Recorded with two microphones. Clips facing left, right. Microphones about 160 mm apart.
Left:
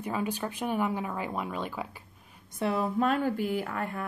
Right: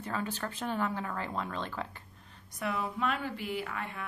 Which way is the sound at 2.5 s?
30° left (ahead or behind).